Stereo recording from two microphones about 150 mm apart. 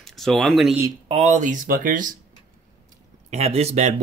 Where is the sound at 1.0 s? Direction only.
50° right (ahead or behind).